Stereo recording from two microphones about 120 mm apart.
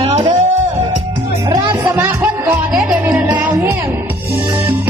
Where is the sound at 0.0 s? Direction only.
65° right (ahead or behind).